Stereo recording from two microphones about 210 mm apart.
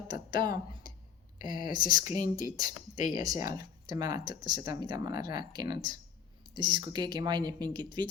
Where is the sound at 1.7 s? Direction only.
40° left (ahead or behind).